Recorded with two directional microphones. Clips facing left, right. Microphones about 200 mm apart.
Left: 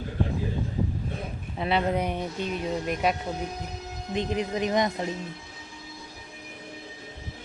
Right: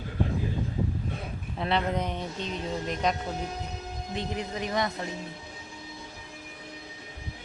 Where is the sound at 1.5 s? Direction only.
5° left (ahead or behind).